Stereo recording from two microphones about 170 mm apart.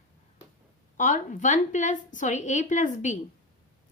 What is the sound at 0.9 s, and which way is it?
A woman's voice, 50° left (ahead or behind).